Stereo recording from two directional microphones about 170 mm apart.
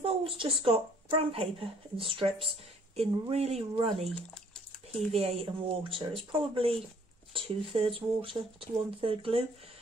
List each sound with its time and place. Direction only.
0.0 s a sound: 35° right (ahead or behind)
0.6 s speech: 30° right (ahead or behind)
7.3 s speech: 30° right (ahead or behind)